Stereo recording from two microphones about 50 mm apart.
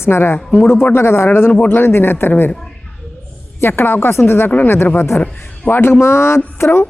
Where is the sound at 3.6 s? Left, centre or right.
Left.